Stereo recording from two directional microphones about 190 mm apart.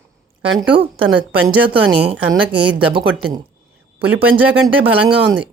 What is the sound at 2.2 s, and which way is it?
Speech, 10° right (ahead or behind).